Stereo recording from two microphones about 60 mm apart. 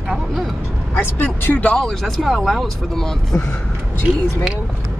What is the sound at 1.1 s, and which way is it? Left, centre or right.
Speech, left.